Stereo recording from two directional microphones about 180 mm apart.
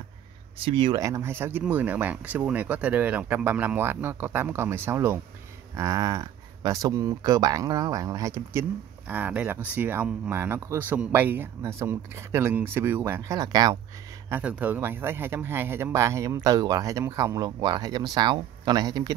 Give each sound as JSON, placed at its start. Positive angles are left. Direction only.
{"t": 0.6, "sound": "speech", "side_deg": -30}
{"t": 14.3, "sound": "speech", "side_deg": -10}